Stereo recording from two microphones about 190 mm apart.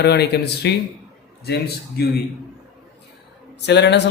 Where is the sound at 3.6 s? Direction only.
65° left (ahead or behind).